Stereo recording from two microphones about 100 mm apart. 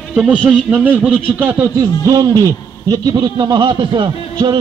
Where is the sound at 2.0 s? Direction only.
40° right (ahead or behind).